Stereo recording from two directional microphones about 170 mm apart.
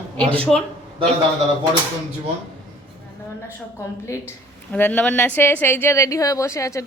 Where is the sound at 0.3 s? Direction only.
10° left (ahead or behind).